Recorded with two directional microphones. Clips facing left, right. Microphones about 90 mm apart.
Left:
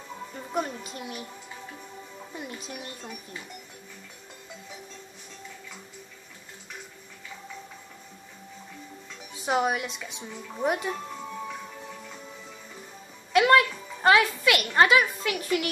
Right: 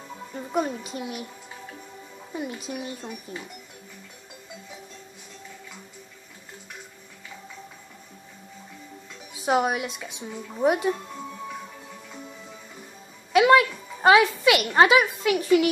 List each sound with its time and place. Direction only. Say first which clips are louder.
0.5 s speech: right 4 dB; 10° right (ahead or behind)
2.3 s speech: right 7 dB; 10° right (ahead or behind)
9.4 s speech: right 3 dB; 5° right (ahead or behind)
13.3 s a woman's voice: right 3 dB; 5° right (ahead or behind)